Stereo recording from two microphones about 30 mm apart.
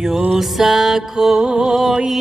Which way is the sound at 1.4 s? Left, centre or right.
Right.